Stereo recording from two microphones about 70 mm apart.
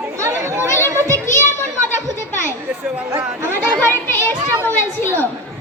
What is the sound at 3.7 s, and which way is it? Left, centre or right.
A child's voice, left.